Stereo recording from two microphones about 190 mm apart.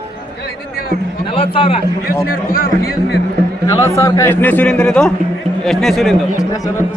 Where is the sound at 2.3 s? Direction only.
45° left (ahead or behind).